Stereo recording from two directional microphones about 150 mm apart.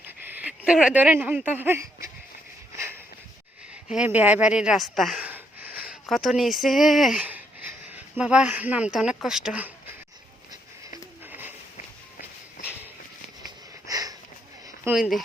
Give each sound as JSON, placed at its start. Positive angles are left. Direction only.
{"t": 0.3, "sound": "speech", "side_deg": -10}
{"t": 2.7, "sound": "a sound", "side_deg": -20}
{"t": 3.9, "sound": "speech", "side_deg": -10}
{"t": 5.2, "sound": "speech", "side_deg": -10}
{"t": 11.3, "sound": "a sound", "side_deg": -15}
{"t": 13.8, "sound": "sniff", "side_deg": -25}
{"t": 14.9, "sound": "speech", "side_deg": -15}